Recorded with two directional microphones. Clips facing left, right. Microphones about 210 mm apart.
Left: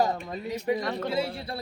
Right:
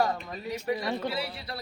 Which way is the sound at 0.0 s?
25° left (ahead or behind).